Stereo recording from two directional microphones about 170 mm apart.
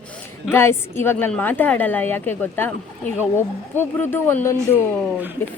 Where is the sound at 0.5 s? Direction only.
15° left (ahead or behind).